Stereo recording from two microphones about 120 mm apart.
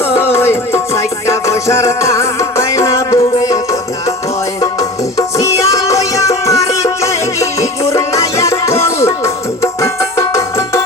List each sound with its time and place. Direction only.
0.2 s music: 20° left (ahead or behind)